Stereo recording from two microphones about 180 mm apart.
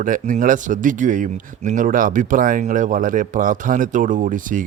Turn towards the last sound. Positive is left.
turn(degrees=-50)  # may be behind; listen again after turning